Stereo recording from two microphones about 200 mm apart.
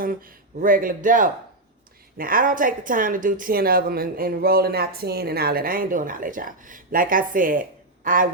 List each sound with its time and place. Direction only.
0.6 s a woman's voice: 45° right (ahead or behind)